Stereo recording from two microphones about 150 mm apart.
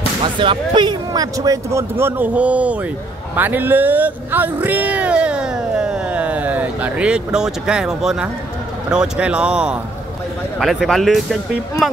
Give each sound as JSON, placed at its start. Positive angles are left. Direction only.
{"t": 0.2, "sound": "speech", "side_deg": -35}